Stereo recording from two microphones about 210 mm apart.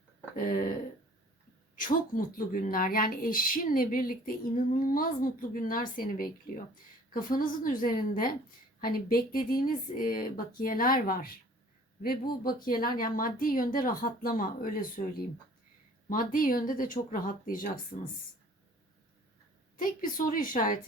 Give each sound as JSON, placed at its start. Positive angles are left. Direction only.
{"t": 0.3, "sound": "speech", "side_deg": 40}
{"t": 1.7, "sound": "speech", "side_deg": 40}
{"t": 16.0, "sound": "speech", "side_deg": 40}
{"t": 19.7, "sound": "speech", "side_deg": 40}